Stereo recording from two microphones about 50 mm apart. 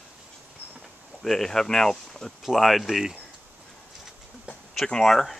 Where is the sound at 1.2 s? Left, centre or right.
Centre.